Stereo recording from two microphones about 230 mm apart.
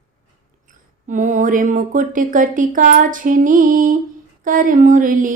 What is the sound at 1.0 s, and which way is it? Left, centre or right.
Speech, right.